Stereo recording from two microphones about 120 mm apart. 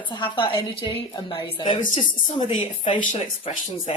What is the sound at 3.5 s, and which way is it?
Speech, 60° left (ahead or behind).